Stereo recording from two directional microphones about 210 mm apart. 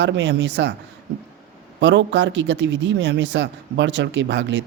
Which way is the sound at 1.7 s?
55° right (ahead or behind).